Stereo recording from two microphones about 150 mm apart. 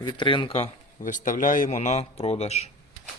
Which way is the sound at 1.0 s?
60° left (ahead or behind).